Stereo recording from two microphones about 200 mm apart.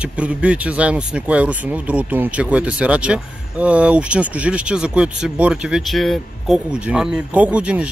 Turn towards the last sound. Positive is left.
turn(degrees=-5)  # may be behind; listen again after turning